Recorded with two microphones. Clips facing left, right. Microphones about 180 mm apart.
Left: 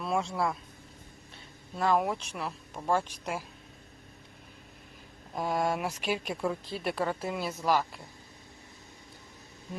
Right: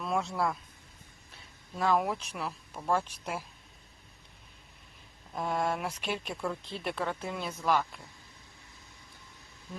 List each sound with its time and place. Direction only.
0.0 s speech: centre (ahead or behind)
1.7 s speech: centre (ahead or behind)
5.4 s speech: 5° left (ahead or behind)